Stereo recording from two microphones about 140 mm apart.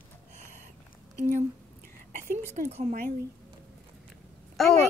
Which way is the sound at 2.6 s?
50° right (ahead or behind).